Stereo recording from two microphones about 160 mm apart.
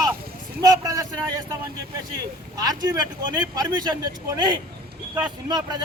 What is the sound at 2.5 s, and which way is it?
Speech, 25° right (ahead or behind).